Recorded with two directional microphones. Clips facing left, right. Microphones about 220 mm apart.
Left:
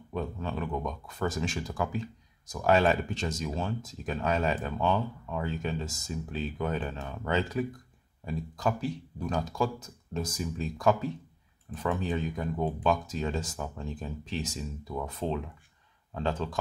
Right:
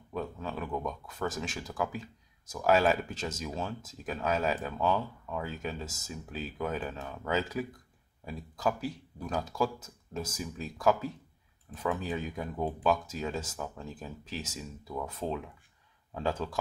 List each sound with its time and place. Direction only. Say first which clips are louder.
0.1 s speech: left 2 dB; centre (ahead or behind)